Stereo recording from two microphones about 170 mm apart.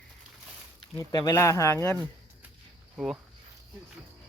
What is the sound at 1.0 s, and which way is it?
Speech, 20° left (ahead or behind).